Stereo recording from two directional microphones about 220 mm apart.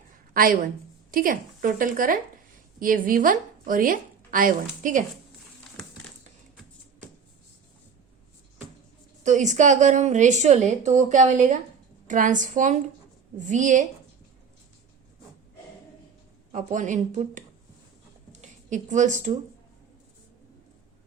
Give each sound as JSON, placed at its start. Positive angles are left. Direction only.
{"t": 0.3, "sound": "a woman's voice", "side_deg": -40}
{"t": 9.2, "sound": "a woman's voice", "side_deg": -35}
{"t": 16.5, "sound": "a woman's voice", "side_deg": -35}
{"t": 18.3, "sound": "a sound", "side_deg": -35}